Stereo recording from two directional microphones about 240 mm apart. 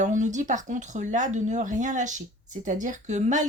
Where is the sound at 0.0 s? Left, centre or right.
Right.